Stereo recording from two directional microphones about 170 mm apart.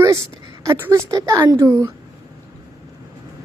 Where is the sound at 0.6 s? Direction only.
20° right (ahead or behind).